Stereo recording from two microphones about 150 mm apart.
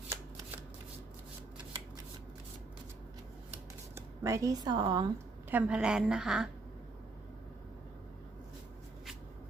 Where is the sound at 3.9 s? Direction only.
20° right (ahead or behind).